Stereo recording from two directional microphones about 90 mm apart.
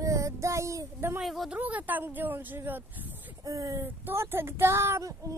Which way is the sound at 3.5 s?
35° right (ahead or behind).